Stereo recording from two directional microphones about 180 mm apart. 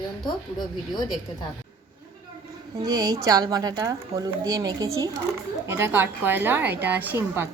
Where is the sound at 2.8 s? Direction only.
20° right (ahead or behind).